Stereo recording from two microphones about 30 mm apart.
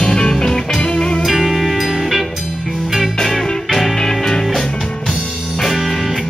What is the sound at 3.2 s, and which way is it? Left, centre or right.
Music, centre.